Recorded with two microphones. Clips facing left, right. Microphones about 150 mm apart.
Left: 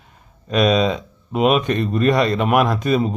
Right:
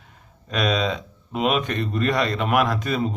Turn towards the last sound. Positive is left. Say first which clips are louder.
# left 5 dB
turn(degrees=20)  # may be behind; listen again after turning